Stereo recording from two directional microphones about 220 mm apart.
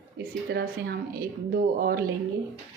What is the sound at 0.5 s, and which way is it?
Speech, 45° right (ahead or behind).